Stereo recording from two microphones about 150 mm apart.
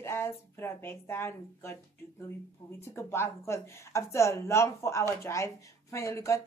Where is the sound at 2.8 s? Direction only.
15° left (ahead or behind).